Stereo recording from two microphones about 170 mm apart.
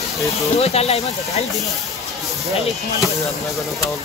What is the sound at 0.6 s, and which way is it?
Speech, 35° left (ahead or behind).